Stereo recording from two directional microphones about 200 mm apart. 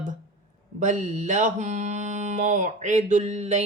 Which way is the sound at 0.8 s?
35° right (ahead or behind).